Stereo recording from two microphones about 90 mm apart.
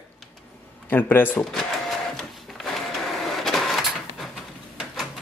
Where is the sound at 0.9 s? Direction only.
20° left (ahead or behind).